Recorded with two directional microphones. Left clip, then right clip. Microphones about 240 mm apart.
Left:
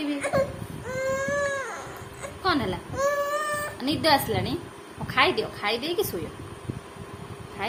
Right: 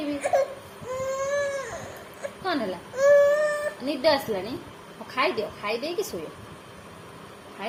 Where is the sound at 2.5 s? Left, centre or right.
Centre.